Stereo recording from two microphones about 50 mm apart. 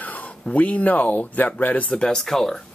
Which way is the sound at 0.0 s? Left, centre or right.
Left.